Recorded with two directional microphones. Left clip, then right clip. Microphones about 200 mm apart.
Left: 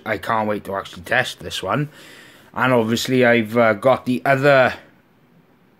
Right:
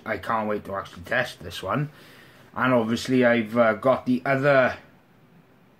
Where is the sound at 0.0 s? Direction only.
40° left (ahead or behind).